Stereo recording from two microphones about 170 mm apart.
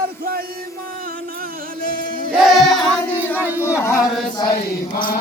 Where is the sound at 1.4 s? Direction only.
55° right (ahead or behind).